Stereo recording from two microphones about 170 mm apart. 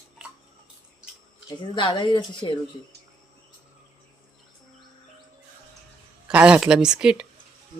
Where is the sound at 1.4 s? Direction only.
30° left (ahead or behind).